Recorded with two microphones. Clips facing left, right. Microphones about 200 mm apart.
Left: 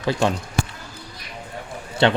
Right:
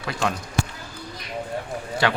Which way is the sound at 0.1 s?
30° left (ahead or behind).